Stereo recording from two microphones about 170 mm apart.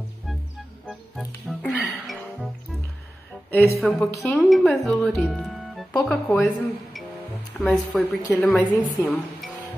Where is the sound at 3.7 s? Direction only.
5° left (ahead or behind).